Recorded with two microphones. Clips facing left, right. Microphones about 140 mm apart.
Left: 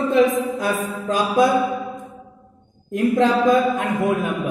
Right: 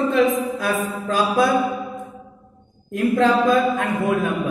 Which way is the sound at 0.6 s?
20° left (ahead or behind).